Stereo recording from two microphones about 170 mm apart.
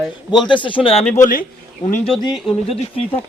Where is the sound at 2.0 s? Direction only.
30° left (ahead or behind).